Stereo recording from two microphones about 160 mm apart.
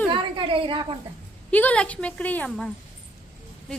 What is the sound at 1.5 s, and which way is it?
A woman's voice, 10° left (ahead or behind).